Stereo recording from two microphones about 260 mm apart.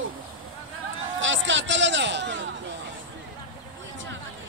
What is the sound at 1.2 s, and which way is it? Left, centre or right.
A man's voice, right.